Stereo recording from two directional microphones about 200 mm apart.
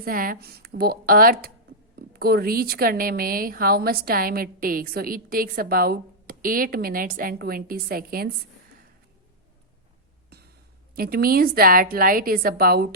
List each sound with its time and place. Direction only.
0.0 s speech: 45° right (ahead or behind)
10.9 s speech: 50° right (ahead or behind)